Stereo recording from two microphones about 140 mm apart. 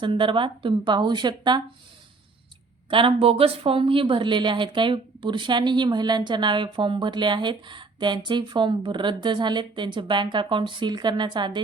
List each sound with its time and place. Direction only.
0.0 s speech: 35° right (ahead or behind)
2.9 s speech: 40° right (ahead or behind)